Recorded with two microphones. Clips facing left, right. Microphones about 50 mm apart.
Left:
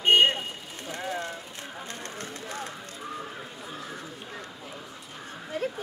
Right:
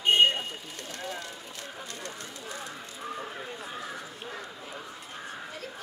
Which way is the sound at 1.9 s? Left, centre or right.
Left.